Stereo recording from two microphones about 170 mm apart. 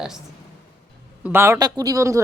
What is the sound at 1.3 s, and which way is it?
Speech, 15° right (ahead or behind).